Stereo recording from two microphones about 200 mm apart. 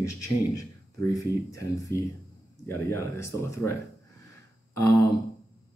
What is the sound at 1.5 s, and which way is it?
Speech, 15° left (ahead or behind).